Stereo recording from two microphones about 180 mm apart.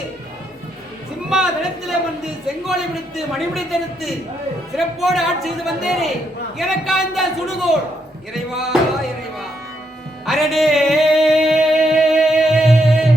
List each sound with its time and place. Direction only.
1.3 s a sound: 5° right (ahead or behind)
1.9 s a man's voice: centre (ahead or behind)
10.2 s music: centre (ahead or behind)